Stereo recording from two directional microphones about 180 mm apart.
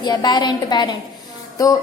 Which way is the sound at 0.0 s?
25° left (ahead or behind).